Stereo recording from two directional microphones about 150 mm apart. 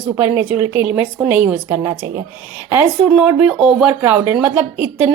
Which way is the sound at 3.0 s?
Centre (ahead or behind).